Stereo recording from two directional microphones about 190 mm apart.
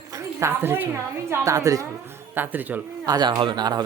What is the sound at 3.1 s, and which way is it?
Speech, 20° right (ahead or behind).